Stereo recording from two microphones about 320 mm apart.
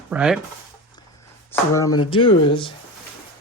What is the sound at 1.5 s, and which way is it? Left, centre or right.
Speech, centre.